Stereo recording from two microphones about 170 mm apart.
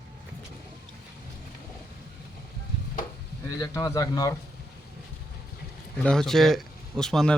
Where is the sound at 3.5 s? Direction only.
20° left (ahead or behind).